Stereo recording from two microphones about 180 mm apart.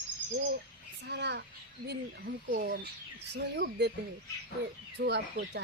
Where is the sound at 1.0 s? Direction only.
75° right (ahead or behind).